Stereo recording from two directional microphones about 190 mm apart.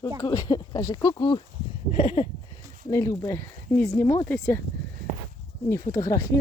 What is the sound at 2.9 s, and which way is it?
Speech, 15° left (ahead or behind).